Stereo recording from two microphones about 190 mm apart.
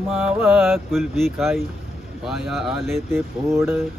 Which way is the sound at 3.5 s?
15° right (ahead or behind).